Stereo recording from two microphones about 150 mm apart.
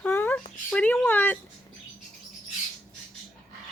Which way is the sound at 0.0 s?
15° left (ahead or behind).